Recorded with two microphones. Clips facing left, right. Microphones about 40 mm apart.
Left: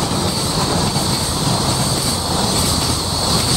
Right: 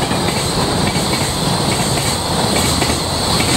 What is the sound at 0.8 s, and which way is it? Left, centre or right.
Train, right.